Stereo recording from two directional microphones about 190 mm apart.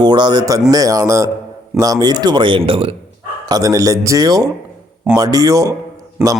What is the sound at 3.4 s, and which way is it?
Speech, 20° right (ahead or behind).